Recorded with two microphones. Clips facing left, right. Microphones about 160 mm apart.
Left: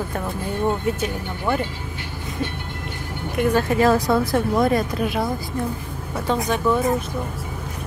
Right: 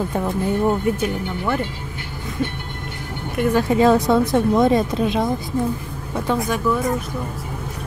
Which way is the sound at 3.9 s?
Centre (ahead or behind).